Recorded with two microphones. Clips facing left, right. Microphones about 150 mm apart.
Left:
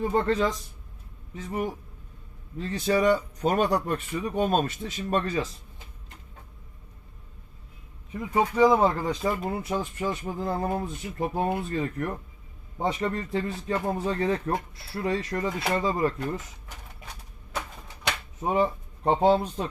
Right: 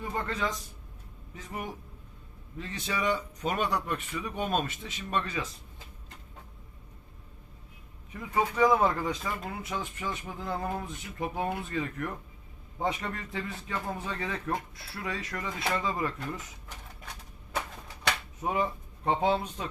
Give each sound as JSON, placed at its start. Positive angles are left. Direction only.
{"t": 0.0, "sound": "speech", "side_deg": 30}
{"t": 8.2, "sound": "speech", "side_deg": 25}
{"t": 18.4, "sound": "speech", "side_deg": 30}